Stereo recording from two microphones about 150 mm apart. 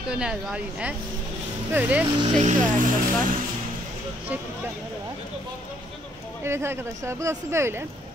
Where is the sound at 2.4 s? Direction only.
55° right (ahead or behind).